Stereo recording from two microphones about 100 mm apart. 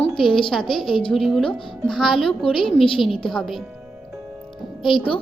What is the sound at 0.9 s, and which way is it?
Speech, 60° left (ahead or behind).